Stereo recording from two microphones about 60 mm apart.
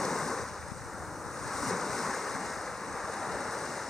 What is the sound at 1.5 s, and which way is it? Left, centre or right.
Waves, centre.